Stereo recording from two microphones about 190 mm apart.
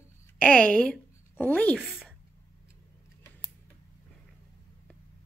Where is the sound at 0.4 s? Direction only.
5° left (ahead or behind).